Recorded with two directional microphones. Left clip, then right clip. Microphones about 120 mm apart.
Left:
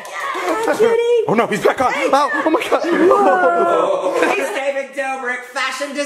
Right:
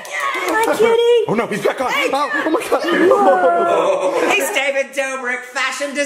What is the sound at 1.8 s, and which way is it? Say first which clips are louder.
Speech: left 2 dB; 50° left (ahead or behind).